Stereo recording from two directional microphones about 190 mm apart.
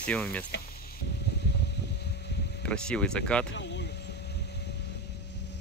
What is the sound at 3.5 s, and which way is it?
Vehicle, 65° left (ahead or behind).